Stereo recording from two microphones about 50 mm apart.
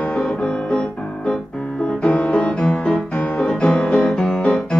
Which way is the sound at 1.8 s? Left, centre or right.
Left.